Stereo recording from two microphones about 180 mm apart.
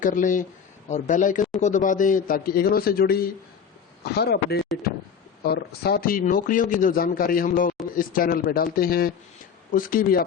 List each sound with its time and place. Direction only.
0.0 s a man's voice: 45° left (ahead or behind)